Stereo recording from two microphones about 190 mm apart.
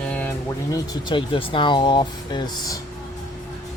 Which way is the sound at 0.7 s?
25° left (ahead or behind).